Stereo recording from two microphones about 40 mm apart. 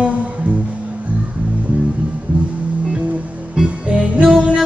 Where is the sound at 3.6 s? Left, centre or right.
Right.